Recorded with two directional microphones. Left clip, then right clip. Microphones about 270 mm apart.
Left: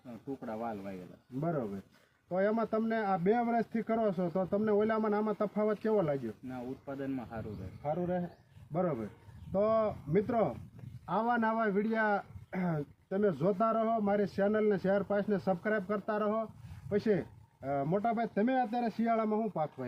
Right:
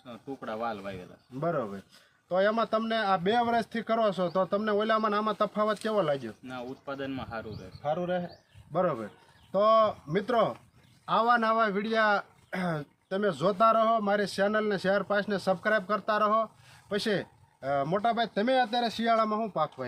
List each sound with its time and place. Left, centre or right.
0.4 s a man's voice: centre